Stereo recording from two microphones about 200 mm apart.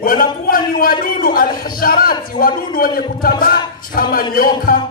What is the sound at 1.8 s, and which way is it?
A man's voice, 45° left (ahead or behind).